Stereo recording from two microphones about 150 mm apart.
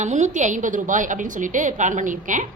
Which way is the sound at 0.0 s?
50° right (ahead or behind).